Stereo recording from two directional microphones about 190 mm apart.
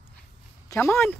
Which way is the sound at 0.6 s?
15° left (ahead or behind).